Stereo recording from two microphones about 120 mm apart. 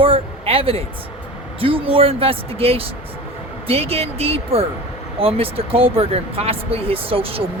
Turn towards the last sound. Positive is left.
turn(degrees=-50)  # may be behind; listen again after turning